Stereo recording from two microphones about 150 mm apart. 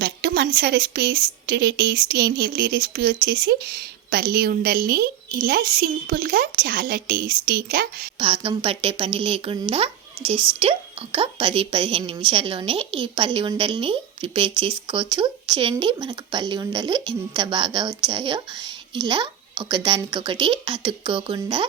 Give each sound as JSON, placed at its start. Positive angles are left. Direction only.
{"t": 0.0, "sound": "a woman's voice", "side_deg": -90}
{"t": 8.2, "sound": "a woman's voice", "side_deg": -35}